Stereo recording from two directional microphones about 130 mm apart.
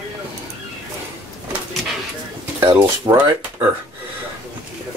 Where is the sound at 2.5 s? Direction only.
25° right (ahead or behind).